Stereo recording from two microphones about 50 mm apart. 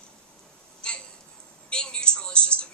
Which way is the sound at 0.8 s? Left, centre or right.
Centre.